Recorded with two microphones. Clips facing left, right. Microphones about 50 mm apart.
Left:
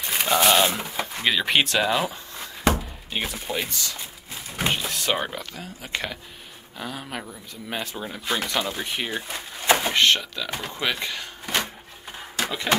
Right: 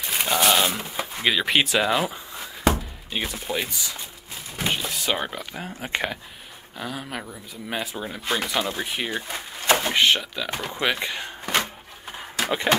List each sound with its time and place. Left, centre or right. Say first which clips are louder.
0.0 s speech: left 1 dB; centre
5.6 s speech: right 5 dB; right
6.8 s speech: right 1 dB; centre
9.6 s a sound: even; centre
9.9 s speech: even; centre